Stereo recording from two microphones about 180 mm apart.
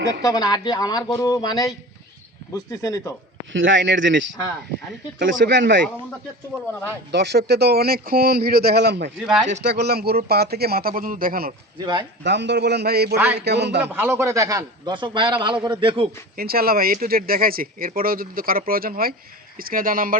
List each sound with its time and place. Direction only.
0.2 s speech: 20° left (ahead or behind)
3.5 s speech: 90° right
5.2 s speech: 80° right
7.1 s a man's voice: 70° right (ahead or behind)
12.2 s a man's voice: 75° right (ahead or behind)
13.8 s a man's voice: 10° right (ahead or behind); by 16.0 s 30° right (ahead or behind)
16.3 s speech: 55° right (ahead or behind)